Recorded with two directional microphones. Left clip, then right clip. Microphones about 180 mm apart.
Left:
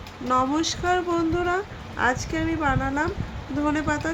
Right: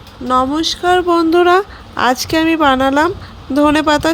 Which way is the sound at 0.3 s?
35° right (ahead or behind).